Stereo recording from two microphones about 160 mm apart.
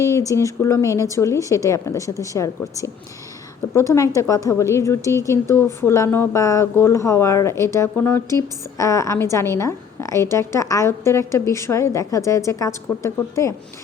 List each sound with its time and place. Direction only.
0.0 s a woman's voice: 20° left (ahead or behind)